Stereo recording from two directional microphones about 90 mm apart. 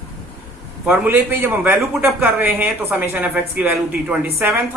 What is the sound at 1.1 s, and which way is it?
Speech, 25° right (ahead or behind).